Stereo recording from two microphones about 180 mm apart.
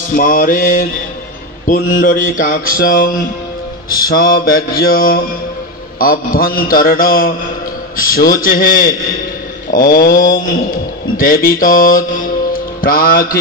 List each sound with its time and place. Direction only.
0.1 s speech: 50° left (ahead or behind)
4.1 s speech: 55° left (ahead or behind)
12.5 s music: 50° left (ahead or behind)